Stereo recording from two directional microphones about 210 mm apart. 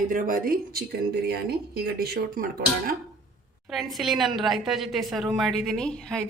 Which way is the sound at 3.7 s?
Centre (ahead or behind).